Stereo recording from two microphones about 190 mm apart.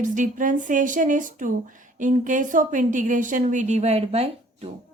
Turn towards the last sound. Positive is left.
turn(degrees=-30)  # may be behind; listen again after turning